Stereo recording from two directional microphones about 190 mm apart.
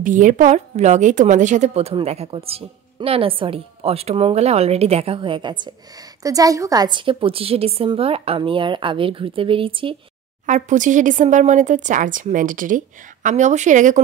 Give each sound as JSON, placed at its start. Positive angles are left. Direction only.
{"t": 0.0, "sound": "a woman's voice", "side_deg": -45}
{"t": 10.4, "sound": "speech", "side_deg": -40}